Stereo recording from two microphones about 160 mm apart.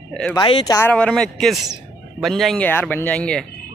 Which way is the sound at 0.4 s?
30° left (ahead or behind).